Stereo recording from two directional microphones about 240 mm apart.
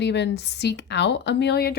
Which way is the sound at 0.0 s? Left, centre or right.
Left.